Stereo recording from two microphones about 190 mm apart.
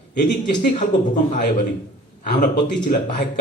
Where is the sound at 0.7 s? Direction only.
40° left (ahead or behind).